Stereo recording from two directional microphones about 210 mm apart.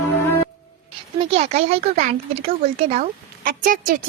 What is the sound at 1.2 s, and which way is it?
A child's voice, 30° right (ahead or behind).